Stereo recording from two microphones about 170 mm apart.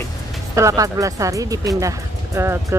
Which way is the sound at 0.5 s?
20° right (ahead or behind).